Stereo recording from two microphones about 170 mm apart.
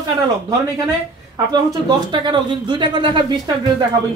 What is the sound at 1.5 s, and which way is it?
Speech, 25° right (ahead or behind).